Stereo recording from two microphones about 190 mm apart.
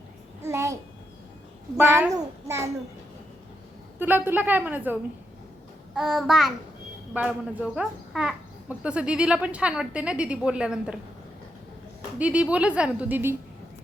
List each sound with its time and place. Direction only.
0.4 s babbling: 15° right (ahead or behind)
1.8 s a woman's voice: 15° right (ahead or behind)
4.0 s a woman's voice: 10° right (ahead or behind)
12.2 s a woman's voice: 5° right (ahead or behind)